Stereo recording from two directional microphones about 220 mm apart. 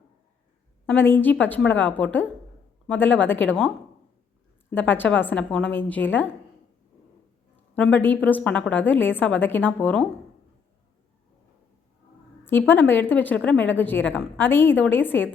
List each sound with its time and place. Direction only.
0.9 s a woman's voice: 10° left (ahead or behind)
4.7 s a woman's voice: 10° left (ahead or behind)
7.8 s a woman's voice: 10° left (ahead or behind)
12.5 s a woman's voice: 10° left (ahead or behind)